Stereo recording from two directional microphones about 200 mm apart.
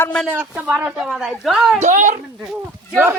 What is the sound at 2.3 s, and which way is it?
Speech, centre (ahead or behind).